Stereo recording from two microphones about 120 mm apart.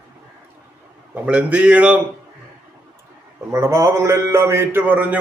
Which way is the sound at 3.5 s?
25° right (ahead or behind).